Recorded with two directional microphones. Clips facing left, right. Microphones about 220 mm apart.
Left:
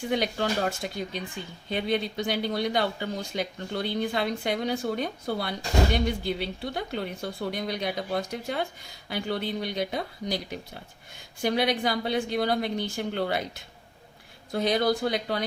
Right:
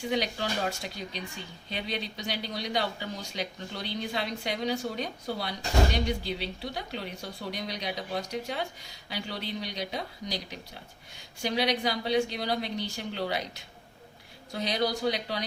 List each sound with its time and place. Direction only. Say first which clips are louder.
0.1 s speech: left 4 dB; 50° left (ahead or behind)
14.5 s speech: left 5 dB; 50° left (ahead or behind)